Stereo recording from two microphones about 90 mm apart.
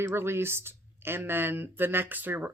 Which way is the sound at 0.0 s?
25° right (ahead or behind).